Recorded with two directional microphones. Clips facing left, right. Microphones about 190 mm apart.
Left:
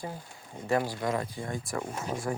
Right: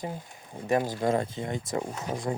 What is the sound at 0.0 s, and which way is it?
Speech, 20° right (ahead or behind).